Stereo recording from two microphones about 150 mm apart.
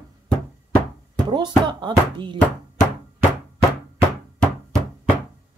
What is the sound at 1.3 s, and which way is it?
Speech, 30° right (ahead or behind).